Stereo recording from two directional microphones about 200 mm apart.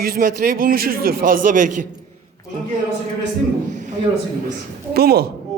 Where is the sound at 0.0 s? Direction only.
50° right (ahead or behind).